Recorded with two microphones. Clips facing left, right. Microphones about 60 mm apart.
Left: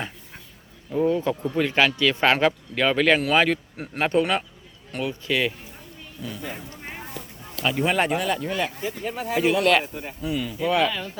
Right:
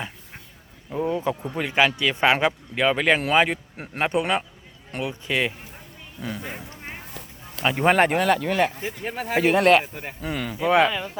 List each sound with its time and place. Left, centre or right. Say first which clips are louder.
1.0 s speech: left 2 dB; centre
7.5 s a sound: right 1 dB; right
7.8 s speech: right 5 dB; right
8.8 s speech: left 1 dB; right
10.7 s speech: right 4 dB; right
10.9 s speech: right 2 dB; centre